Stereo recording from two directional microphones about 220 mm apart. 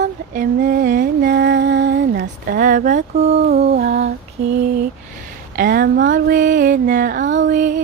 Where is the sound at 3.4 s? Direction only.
45° right (ahead or behind).